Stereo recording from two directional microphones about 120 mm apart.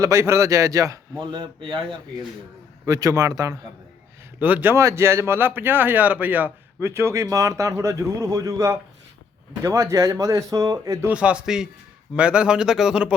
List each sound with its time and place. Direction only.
0.0 s speech: 25° right (ahead or behind)
1.2 s speech: 40° right (ahead or behind)
2.8 s speech: 30° right (ahead or behind)
4.4 s speech: 15° right (ahead or behind)
11.1 s speech: 10° right (ahead or behind)